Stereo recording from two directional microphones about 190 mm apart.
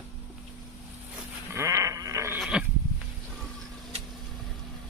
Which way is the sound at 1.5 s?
15° right (ahead or behind).